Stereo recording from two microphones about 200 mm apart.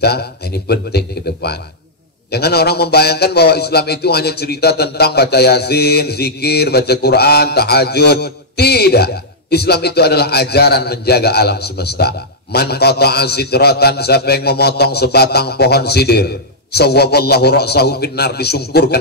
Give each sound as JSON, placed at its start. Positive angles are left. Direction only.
{"t": 0.0, "sound": "a man's voice", "side_deg": 55}